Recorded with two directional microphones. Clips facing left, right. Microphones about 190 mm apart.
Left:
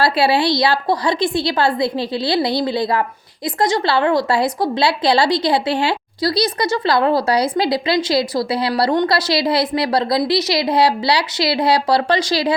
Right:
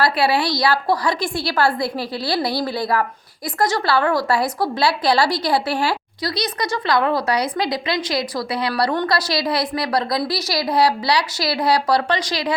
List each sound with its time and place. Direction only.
0.0 s a woman's voice: 25° left (ahead or behind)